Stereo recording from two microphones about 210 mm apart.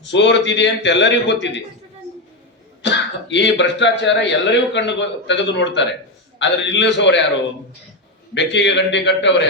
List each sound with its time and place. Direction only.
0.0 s speech: 60° left (ahead or behind)
2.8 s speech: 60° left (ahead or behind)
8.4 s speech: 60° left (ahead or behind)